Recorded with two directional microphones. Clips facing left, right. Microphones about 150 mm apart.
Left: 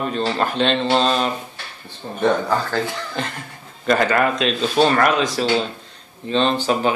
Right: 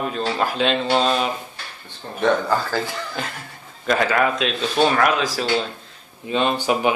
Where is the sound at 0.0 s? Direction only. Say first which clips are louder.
Left 1 dB; 5° right (ahead or behind).